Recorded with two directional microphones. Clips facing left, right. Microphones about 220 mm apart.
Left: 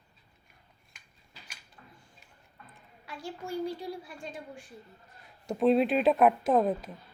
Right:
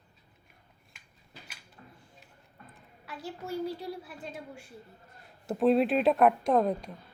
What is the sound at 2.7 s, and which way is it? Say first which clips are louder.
A woman's voice: even; 5° right (ahead or behind).